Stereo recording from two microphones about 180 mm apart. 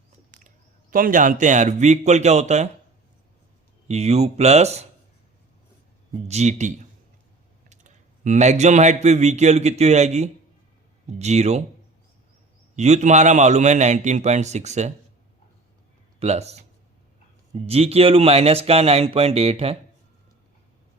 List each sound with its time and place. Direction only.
0.4 s speech: 50° right (ahead or behind)
3.8 s a man's voice: 35° right (ahead or behind)
6.2 s a man's voice: 40° right (ahead or behind)
12.7 s a man's voice: 40° right (ahead or behind)
16.2 s a man's voice: 35° right (ahead or behind)